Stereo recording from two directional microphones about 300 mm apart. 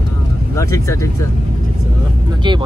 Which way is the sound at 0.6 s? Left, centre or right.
Centre.